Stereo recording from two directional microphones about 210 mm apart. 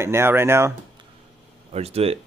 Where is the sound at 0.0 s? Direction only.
10° right (ahead or behind).